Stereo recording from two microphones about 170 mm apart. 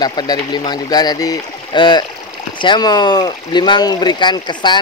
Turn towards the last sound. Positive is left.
turn(degrees=25)  # may be behind; listen again after turning